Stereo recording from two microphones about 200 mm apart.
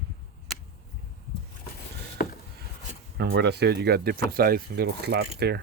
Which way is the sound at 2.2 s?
45° left (ahead or behind).